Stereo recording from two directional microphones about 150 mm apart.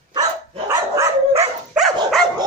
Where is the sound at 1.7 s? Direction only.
Centre (ahead or behind).